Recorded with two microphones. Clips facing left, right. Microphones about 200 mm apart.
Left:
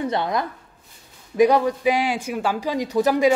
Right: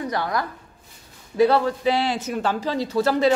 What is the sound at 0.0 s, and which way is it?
Speech, 25° left (ahead or behind).